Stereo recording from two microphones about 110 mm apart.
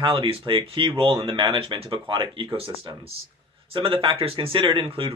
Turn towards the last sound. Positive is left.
turn(degrees=-55)  # may be behind; listen again after turning